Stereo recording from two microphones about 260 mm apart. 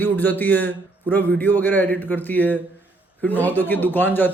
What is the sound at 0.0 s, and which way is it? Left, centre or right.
A man's voice, centre.